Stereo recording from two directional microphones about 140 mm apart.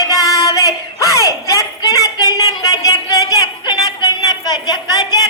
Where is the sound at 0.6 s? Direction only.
25° left (ahead or behind).